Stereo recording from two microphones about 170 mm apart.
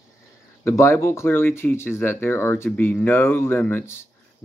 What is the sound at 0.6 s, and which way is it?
Speech, 15° left (ahead or behind).